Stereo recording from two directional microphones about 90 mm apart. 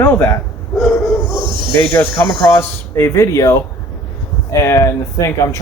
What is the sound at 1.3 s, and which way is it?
Snake, 60° right (ahead or behind).